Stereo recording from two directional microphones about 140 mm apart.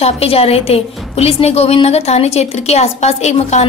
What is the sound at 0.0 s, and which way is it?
A woman's voice, 45° left (ahead or behind).